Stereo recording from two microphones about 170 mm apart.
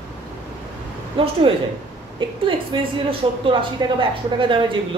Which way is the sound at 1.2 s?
30° right (ahead or behind).